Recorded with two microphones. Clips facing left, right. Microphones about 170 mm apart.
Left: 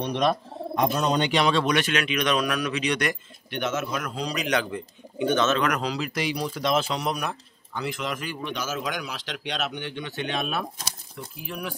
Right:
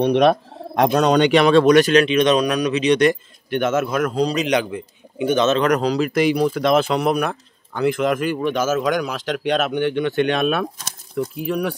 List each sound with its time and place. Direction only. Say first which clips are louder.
0.0 s speech: right 9 dB; 65° right (ahead or behind); by 3.2 s 25° right (ahead or behind)
3.4 s speech: right 9 dB; 50° right (ahead or behind)
4.2 s a man's voice: right 11 dB; 30° right (ahead or behind)
4.5 s speech: right 6 dB; 15° right (ahead or behind)
5.6 s speech: right 8 dB; 35° right (ahead or behind); by 11.7 s 65° right (ahead or behind)